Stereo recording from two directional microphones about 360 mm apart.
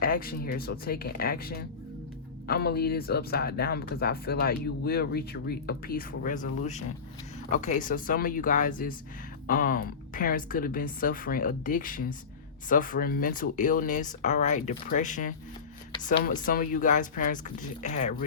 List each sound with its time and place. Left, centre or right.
0.0 s speech: left